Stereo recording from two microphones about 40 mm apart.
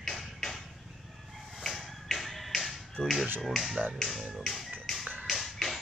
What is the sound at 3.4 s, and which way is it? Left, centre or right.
Speech, centre.